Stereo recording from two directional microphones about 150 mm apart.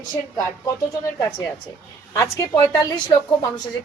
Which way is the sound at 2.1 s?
20° left (ahead or behind).